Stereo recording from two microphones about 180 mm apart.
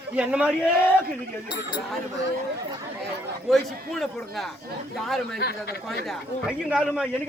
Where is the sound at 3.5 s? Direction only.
Centre (ahead or behind).